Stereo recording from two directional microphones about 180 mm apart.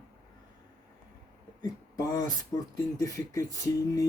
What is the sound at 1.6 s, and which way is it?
Speech, 20° left (ahead or behind).